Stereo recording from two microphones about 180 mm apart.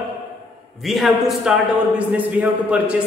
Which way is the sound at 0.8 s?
Centre (ahead or behind).